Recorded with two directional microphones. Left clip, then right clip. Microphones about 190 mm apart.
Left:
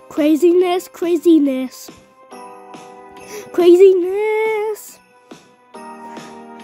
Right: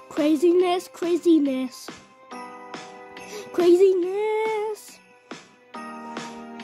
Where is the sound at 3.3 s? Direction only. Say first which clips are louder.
Left 6 dB; 45° left (ahead or behind).